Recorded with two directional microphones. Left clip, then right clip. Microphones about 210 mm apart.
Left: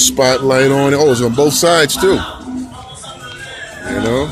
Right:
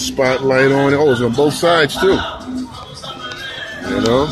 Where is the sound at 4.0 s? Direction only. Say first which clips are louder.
Right 2 dB; centre (ahead or behind).